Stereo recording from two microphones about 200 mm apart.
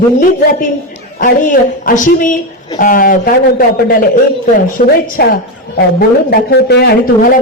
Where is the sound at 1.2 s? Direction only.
40° left (ahead or behind).